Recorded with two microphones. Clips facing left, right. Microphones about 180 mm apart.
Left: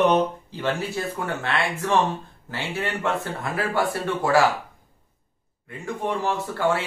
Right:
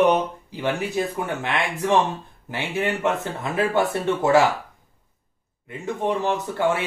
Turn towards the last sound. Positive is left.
turn(degrees=-20)  # may be behind; listen again after turning